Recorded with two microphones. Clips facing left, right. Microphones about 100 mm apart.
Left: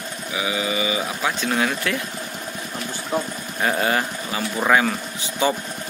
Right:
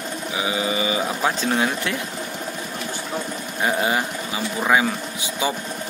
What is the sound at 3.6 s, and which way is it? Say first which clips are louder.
Speech: even; 15° right (ahead or behind).